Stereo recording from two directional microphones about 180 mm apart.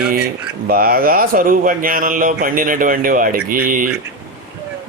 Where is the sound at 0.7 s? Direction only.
55° right (ahead or behind).